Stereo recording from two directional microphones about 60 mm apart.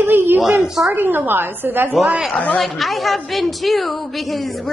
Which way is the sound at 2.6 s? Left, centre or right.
Centre.